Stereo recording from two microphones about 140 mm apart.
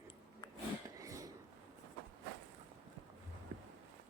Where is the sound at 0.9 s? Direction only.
25° right (ahead or behind).